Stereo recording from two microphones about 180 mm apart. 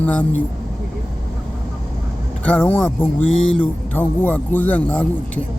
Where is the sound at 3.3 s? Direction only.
90° left.